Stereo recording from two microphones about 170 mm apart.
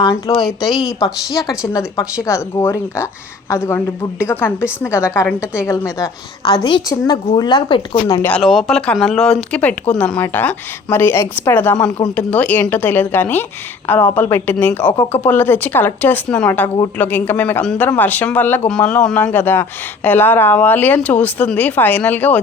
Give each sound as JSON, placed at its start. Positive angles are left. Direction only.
{"t": 0.0, "sound": "a woman's voice", "side_deg": 20}
{"t": 0.3, "sound": "speech", "side_deg": 0}
{"t": 1.6, "sound": "a woman's voice", "side_deg": 20}
{"t": 8.3, "sound": "a woman's voice", "side_deg": 0}